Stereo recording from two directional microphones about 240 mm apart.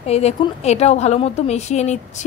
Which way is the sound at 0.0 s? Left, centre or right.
Left.